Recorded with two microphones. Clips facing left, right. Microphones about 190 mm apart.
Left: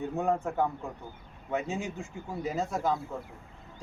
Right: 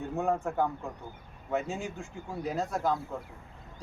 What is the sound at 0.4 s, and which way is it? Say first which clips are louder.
Speech: even; centre (ahead or behind).